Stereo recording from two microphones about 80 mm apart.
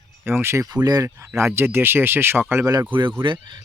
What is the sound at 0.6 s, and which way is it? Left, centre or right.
Speech, right.